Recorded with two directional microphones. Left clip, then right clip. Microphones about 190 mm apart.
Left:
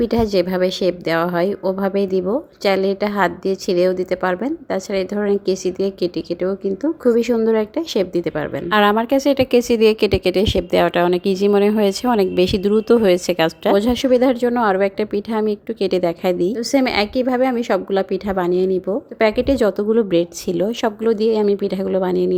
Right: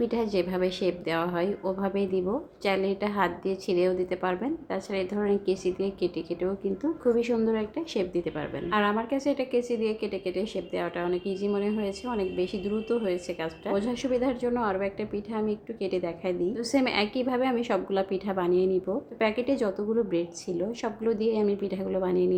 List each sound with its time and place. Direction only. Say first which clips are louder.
0.0 s a woman's voice: left 10 dB; 45° left (ahead or behind)